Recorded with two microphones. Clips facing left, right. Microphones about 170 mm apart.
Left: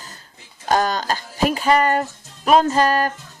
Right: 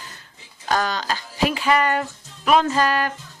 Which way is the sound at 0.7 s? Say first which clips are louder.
Left 3 dB; 45° left (ahead or behind).